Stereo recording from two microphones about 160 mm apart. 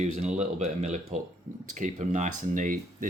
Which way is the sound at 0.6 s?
45° right (ahead or behind).